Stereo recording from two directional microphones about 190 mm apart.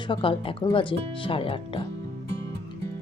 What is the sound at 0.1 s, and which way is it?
Speech, 25° left (ahead or behind).